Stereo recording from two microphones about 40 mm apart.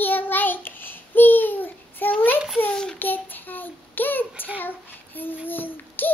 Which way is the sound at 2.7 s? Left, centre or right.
Left.